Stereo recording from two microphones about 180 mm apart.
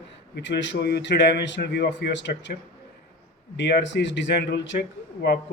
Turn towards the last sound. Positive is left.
turn(degrees=60)  # may be behind; listen again after turning